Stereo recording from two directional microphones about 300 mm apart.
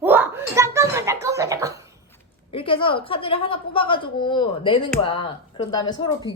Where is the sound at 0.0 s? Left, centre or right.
Centre.